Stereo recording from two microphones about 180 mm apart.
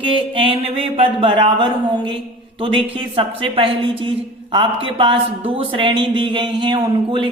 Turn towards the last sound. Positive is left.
turn(degrees=-25)  # may be behind; listen again after turning